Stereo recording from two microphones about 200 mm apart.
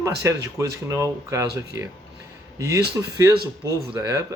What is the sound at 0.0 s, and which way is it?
Speech, 15° right (ahead or behind).